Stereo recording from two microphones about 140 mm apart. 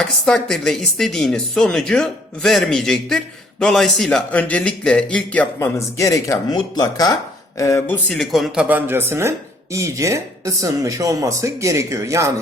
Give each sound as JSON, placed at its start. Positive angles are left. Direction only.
{"t": 0.0, "sound": "a woman's voice", "side_deg": 5}
{"t": 8.0, "sound": "a woman's voice", "side_deg": 0}
{"t": 8.6, "sound": "a man's voice", "side_deg": -15}